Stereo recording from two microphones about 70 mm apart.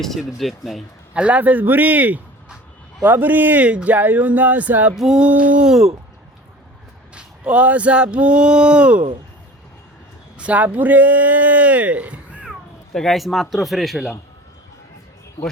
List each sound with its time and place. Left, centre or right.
0.2 s speech: centre
1.1 s speech: centre
4.9 s speech: centre
5.2 s speech: centre
7.1 s speech: centre
10.3 s speech: centre
12.5 s speech: centre